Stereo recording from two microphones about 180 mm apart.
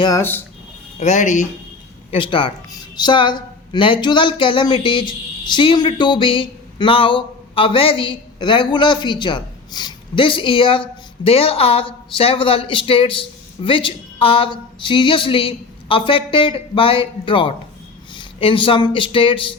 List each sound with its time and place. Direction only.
0.0 s speech: 15° left (ahead or behind)
0.9 s speech: 40° left (ahead or behind)
2.0 s speech: 30° left (ahead or behind)